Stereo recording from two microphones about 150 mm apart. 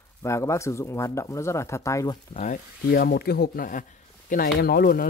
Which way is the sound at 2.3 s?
55° left (ahead or behind).